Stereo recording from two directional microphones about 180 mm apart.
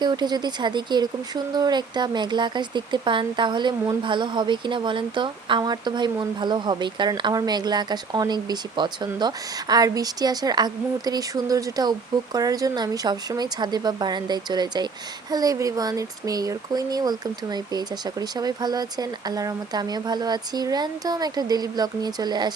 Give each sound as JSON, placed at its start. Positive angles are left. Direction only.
{"t": 0.0, "sound": "speech", "side_deg": -25}